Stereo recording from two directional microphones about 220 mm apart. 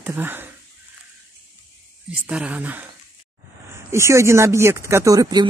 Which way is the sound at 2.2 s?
5° right (ahead or behind).